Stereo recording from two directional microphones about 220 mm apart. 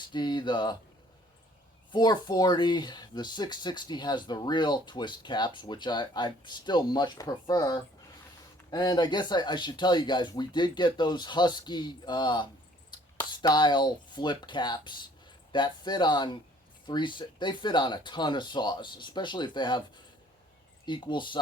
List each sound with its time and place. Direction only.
0.1 s speech: 20° left (ahead or behind)
1.9 s speech: 20° left (ahead or behind)
20.8 s speech: 20° left (ahead or behind)